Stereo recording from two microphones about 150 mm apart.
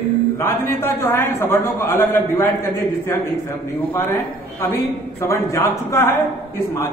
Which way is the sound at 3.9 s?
15° left (ahead or behind).